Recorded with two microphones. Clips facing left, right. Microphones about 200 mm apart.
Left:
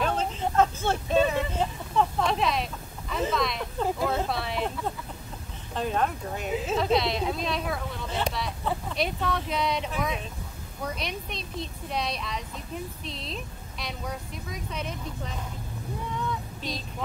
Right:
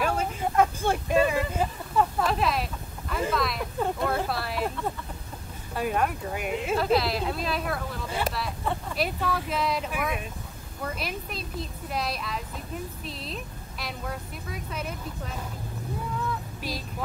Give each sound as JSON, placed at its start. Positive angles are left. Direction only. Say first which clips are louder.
{"t": 0.0, "sound": "vehicle", "louder": "even", "side_deg": -10}
{"t": 5.8, "sound": "speech", "louder": "right 1 dB", "side_deg": -10}
{"t": 16.2, "sound": "female singing", "louder": "even", "side_deg": -5}